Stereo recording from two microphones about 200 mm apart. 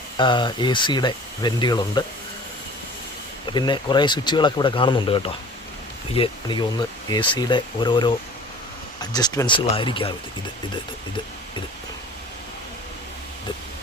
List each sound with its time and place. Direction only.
0.2 s speech: 20° left (ahead or behind)
3.5 s speech: 20° left (ahead or behind)